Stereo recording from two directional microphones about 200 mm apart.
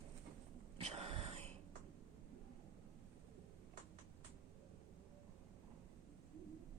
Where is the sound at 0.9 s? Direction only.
30° right (ahead or behind).